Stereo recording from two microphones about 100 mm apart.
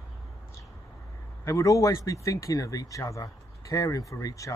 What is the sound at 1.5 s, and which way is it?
Speech, 30° left (ahead or behind).